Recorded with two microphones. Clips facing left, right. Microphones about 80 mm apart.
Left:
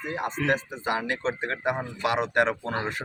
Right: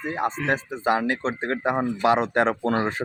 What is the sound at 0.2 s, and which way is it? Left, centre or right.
Speech, right.